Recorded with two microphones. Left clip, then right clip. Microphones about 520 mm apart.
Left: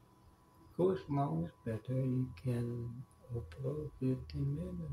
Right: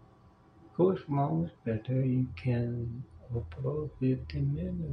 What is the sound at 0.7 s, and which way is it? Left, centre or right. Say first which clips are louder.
Speech: right 6 dB; left.